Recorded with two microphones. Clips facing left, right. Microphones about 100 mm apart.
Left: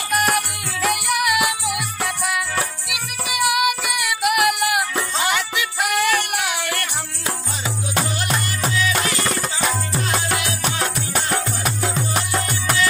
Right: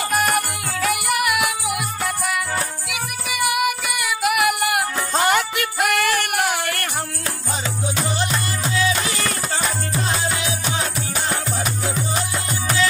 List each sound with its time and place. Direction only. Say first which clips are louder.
0.1 s music: left 2 dB; centre (ahead or behind)
2.9 s music: even; centre (ahead or behind)
5.3 s music: right 3 dB; 50° right (ahead or behind)
5.9 s singing: left 1 dB; centre (ahead or behind)
8.0 s music: even; 5° left (ahead or behind)